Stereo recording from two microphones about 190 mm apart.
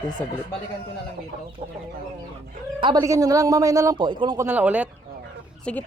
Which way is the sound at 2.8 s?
20° right (ahead or behind).